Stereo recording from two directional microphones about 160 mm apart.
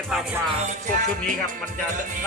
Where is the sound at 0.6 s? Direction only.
55° right (ahead or behind).